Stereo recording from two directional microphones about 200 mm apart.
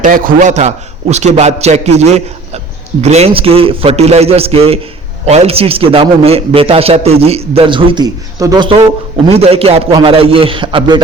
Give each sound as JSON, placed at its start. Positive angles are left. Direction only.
{"t": 0.0, "sound": "a man's voice", "side_deg": -45}